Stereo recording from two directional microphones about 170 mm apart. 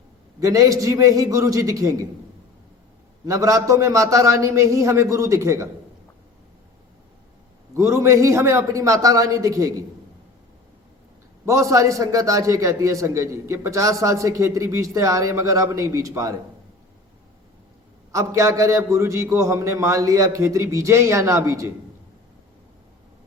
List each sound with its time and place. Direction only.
0.3 s a man's voice: 20° right (ahead or behind)
3.2 s a man's voice: 20° right (ahead or behind)
7.7 s a man's voice: 15° right (ahead or behind)
11.4 s a man's voice: 20° right (ahead or behind)
18.1 s a man's voice: 15° right (ahead or behind)